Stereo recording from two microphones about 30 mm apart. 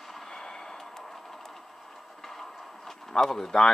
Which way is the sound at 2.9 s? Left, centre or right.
Centre.